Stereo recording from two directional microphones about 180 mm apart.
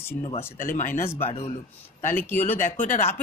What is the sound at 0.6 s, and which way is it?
Speech, 50° left (ahead or behind).